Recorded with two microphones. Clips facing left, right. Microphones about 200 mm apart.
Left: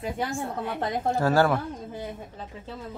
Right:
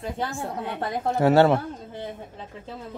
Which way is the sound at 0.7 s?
20° right (ahead or behind).